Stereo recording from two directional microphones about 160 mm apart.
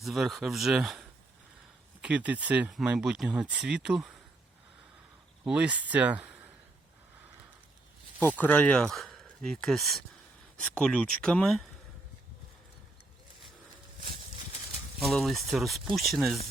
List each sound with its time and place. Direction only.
0.0 s speech: centre (ahead or behind)
5.5 s speech: 5° right (ahead or behind)
8.4 s speech: 10° left (ahead or behind)
14.0 s horse: 70° right (ahead or behind)
14.9 s speech: centre (ahead or behind)